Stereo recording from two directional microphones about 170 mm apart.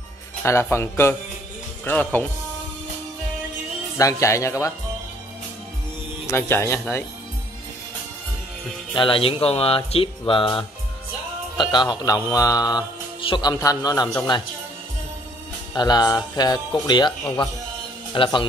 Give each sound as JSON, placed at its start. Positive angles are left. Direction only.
{"t": 0.4, "sound": "speech", "side_deg": 15}
{"t": 4.0, "sound": "music", "side_deg": 20}
{"t": 6.2, "sound": "speech", "side_deg": 15}
{"t": 8.9, "sound": "speech", "side_deg": 30}
{"t": 11.5, "sound": "music", "side_deg": 25}
{"t": 15.7, "sound": "music", "side_deg": 25}
{"t": 18.1, "sound": "speech", "side_deg": 30}